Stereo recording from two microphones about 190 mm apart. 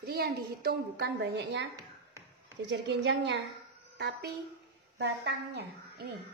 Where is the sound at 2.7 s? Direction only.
65° right (ahead or behind).